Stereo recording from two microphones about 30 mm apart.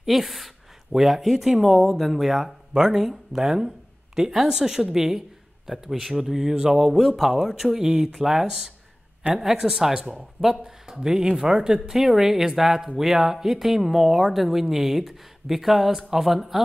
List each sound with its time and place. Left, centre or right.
0.0 s speech: centre
2.7 s speech: centre
6.9 s speech: centre
7.6 s speech: right
12.0 s speech: centre